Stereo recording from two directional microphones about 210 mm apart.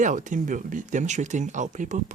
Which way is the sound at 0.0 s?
35° right (ahead or behind).